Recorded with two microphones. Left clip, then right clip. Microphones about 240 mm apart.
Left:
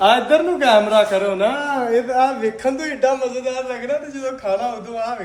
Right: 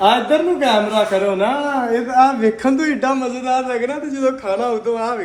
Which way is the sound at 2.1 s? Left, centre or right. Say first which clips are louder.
Right 4 dB; centre.